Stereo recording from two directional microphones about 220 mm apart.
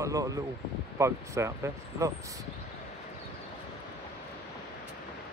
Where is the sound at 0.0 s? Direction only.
15° right (ahead or behind).